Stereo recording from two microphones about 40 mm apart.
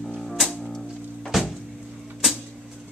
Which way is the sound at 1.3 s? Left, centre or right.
Centre.